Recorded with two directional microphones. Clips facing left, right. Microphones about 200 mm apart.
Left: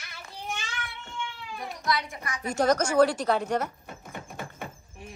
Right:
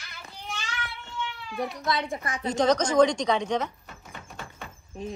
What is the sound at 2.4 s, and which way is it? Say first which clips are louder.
A woman's voice: right 1 dB; 10° left (ahead or behind).